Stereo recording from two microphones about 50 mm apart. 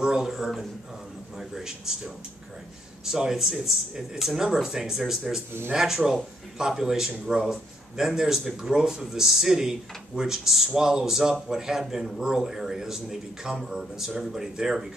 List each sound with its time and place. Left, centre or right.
0.0 s speech: centre
1.5 s speech: centre